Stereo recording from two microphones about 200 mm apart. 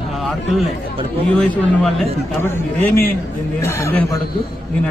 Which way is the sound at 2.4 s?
10° left (ahead or behind).